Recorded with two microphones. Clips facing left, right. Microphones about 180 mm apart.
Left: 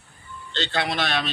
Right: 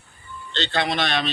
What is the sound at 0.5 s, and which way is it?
Speech, 10° left (ahead or behind).